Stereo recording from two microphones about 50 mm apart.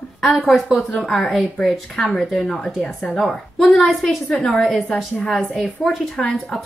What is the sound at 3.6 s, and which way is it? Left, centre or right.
Speech, centre.